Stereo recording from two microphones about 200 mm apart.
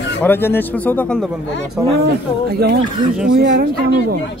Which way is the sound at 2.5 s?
55° right (ahead or behind).